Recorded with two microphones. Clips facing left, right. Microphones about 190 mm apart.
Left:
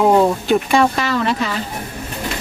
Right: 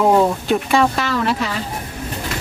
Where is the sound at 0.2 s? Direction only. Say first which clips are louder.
Left 2 dB; centre (ahead or behind).